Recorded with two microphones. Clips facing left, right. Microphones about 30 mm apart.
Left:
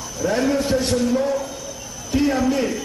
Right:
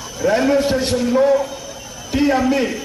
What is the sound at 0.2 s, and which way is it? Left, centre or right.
A man's voice, right.